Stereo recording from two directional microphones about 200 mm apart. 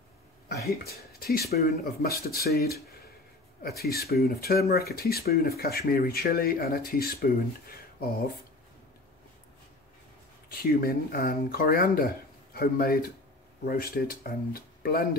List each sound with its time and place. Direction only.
0.8 s speech: 50° left (ahead or behind)
10.5 s speech: 50° left (ahead or behind)